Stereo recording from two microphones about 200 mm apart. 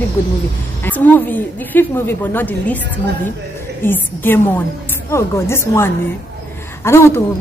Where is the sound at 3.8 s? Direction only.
10° left (ahead or behind).